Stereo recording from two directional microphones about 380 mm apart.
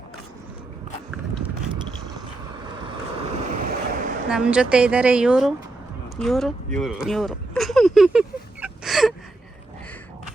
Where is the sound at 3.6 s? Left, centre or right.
Right.